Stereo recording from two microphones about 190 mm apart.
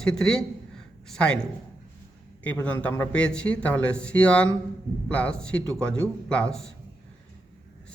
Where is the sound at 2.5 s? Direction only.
10° left (ahead or behind).